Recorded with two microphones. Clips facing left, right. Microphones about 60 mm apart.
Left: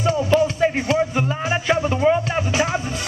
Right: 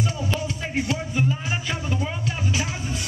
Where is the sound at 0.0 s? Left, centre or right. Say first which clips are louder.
Left 10 dB; left.